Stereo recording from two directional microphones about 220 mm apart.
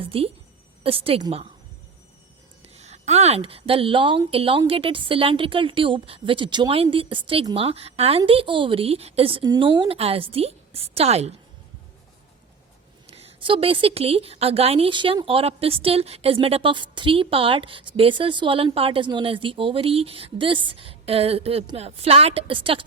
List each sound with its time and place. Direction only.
0.0 s a woman's voice: 25° right (ahead or behind)
2.7 s a woman's voice: 30° right (ahead or behind)
13.1 s a woman's voice: 25° right (ahead or behind)